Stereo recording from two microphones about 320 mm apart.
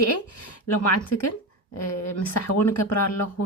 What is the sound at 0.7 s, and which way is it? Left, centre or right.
Speech, left.